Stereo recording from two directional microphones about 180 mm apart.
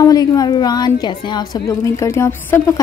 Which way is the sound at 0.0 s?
20° left (ahead or behind).